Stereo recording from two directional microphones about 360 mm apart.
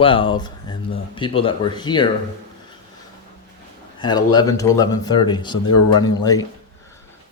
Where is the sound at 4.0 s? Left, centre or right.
Centre.